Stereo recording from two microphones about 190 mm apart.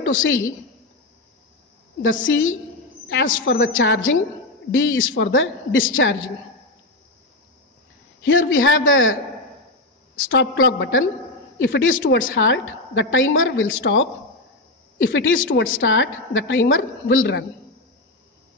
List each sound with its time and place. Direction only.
0.0 s a woman's voice: 90° left
2.2 s a woman's voice: 85° left
8.2 s a woman's voice: 90° left
10.1 s a woman's voice: 90° left